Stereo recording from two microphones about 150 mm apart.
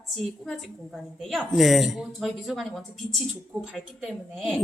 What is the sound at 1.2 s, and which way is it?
Speech, centre (ahead or behind).